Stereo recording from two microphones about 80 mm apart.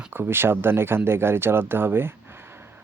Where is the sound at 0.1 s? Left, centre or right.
Right.